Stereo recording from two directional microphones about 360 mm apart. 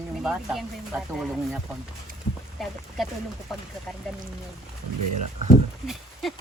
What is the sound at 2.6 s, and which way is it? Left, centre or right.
Speech, centre.